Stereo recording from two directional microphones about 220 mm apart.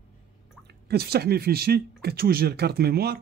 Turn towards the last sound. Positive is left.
turn(degrees=-45)  # may be behind; listen again after turning